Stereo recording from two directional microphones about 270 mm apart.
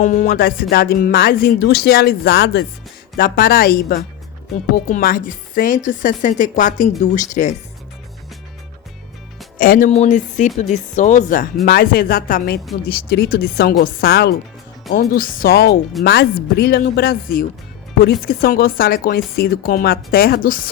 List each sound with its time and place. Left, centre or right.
0.0 s speech: left
9.6 s speech: left